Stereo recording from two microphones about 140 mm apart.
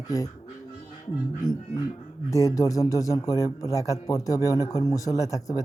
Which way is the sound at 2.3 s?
25° left (ahead or behind).